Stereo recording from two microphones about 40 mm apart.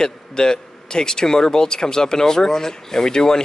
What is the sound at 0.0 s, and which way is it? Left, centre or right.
A man's voice, centre.